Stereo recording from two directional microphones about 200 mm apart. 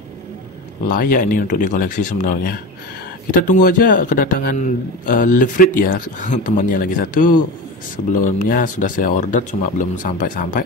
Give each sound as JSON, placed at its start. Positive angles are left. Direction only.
{"t": 0.8, "sound": "a man's voice", "side_deg": 45}